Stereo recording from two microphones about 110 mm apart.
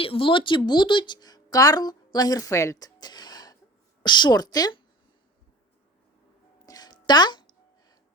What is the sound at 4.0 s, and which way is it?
Speech, 45° left (ahead or behind).